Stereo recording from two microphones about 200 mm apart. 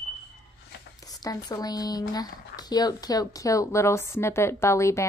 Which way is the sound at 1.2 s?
20° left (ahead or behind).